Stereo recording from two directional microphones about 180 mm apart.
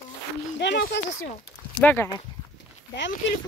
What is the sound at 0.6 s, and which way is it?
Speech, 65° left (ahead or behind).